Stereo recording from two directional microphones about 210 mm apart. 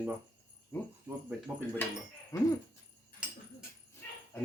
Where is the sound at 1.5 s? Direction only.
5° right (ahead or behind).